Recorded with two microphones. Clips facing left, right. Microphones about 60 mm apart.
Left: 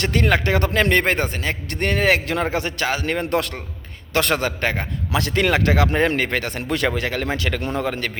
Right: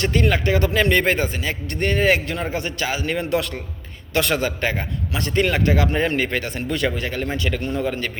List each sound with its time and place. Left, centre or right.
0.0 s a man's voice: left
1.7 s a man's voice: left
5.1 s speech: left